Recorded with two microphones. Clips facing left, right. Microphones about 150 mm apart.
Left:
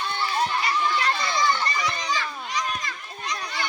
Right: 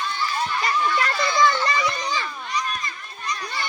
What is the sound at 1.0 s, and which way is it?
Children playing, 90° right.